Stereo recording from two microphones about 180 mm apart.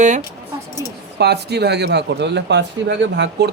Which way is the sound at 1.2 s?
65° right (ahead or behind).